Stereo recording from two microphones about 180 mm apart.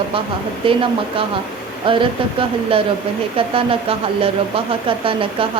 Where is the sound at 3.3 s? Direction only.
30° right (ahead or behind).